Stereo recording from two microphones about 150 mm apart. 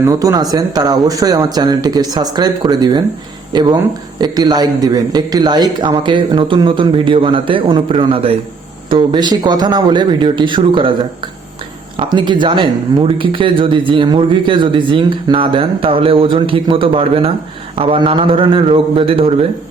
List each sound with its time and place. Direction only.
0.0 s speech: 25° right (ahead or behind)
11.9 s speech: 30° right (ahead or behind)